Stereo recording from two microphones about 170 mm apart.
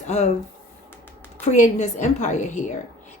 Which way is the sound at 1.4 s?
45° left (ahead or behind).